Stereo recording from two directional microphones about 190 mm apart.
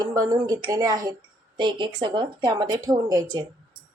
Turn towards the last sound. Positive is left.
turn(degrees=-20)  # may be behind; listen again after turning